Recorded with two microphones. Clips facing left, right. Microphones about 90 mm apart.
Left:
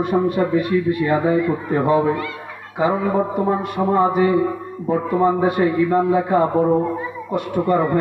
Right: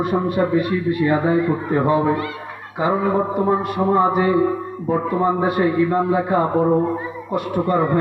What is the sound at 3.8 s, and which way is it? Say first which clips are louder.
A man's voice: left 1 dB; 5° right (ahead or behind).